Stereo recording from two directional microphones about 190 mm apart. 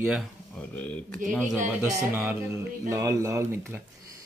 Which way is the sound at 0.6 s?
5° left (ahead or behind).